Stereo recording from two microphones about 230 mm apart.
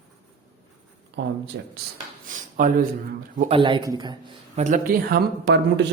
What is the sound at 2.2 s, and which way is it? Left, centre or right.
Speech, right.